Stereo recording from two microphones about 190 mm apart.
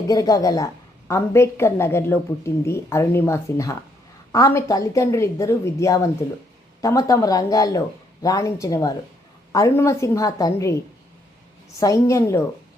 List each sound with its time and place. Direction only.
0.1 s a woman's voice: 20° left (ahead or behind)
11.8 s a woman's voice: 15° left (ahead or behind)